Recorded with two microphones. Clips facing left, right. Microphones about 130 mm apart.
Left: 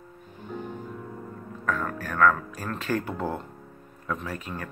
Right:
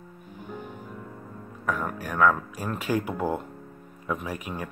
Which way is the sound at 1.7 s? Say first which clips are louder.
Even; 15° right (ahead or behind).